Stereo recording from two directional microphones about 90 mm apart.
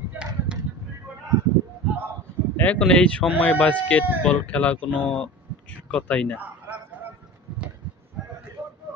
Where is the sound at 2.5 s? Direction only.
15° left (ahead or behind).